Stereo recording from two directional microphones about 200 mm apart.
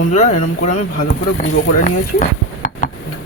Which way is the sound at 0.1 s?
35° left (ahead or behind).